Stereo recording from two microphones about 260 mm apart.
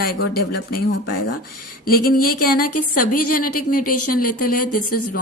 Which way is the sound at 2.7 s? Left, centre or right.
Left.